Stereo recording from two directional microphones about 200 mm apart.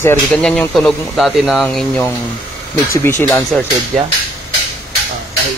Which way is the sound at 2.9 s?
10° left (ahead or behind).